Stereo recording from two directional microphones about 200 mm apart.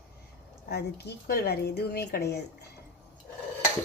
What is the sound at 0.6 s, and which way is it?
Speech, 55° left (ahead or behind).